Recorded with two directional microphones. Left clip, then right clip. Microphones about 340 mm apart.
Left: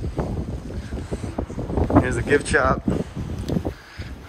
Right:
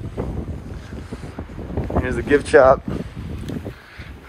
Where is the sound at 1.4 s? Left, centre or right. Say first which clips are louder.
Left 6 dB; left.